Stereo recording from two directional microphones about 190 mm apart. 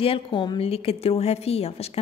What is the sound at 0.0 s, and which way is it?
A woman's voice, 25° left (ahead or behind).